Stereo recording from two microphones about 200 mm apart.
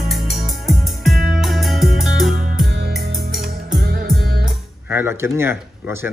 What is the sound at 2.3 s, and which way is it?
Music, 45° right (ahead or behind).